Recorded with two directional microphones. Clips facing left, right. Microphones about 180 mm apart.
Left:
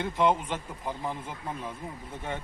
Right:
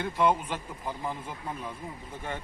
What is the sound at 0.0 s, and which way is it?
Speech, 20° left (ahead or behind).